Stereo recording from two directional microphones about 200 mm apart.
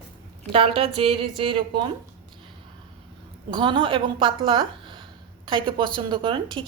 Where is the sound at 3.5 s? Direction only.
25° right (ahead or behind).